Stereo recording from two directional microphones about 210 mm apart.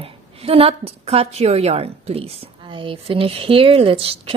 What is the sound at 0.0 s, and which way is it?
A woman's voice, 25° right (ahead or behind).